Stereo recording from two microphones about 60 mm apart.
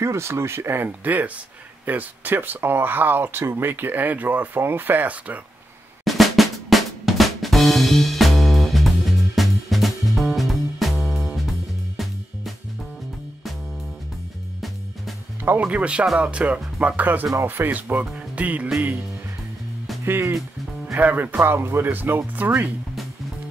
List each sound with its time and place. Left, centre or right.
0.0 s speech: right
6.0 s drum: centre
12.0 s music: centre
15.6 s speech: centre
18.1 s music: right
20.1 s speech: right
21.5 s speech: right